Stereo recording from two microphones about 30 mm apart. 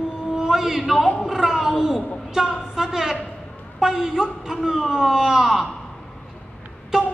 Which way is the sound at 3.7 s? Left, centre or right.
Centre.